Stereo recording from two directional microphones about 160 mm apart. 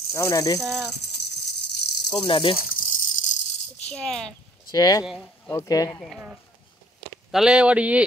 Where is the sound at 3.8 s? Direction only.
5° left (ahead or behind).